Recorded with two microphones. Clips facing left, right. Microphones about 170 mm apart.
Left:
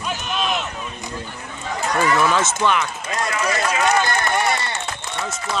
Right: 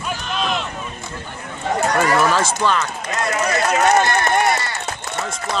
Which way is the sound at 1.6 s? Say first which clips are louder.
Right 3 dB; 45° right (ahead or behind).